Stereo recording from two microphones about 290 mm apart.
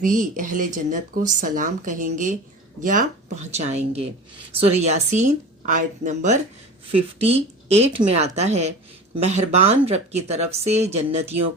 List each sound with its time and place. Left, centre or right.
0.0 s speech: right